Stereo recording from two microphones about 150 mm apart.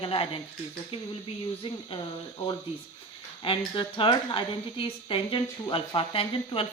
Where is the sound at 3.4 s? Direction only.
35° left (ahead or behind).